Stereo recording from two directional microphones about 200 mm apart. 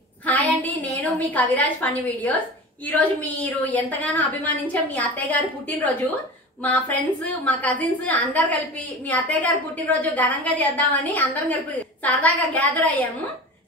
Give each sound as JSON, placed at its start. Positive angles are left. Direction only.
{"t": 0.3, "sound": "a woman's voice", "side_deg": 10}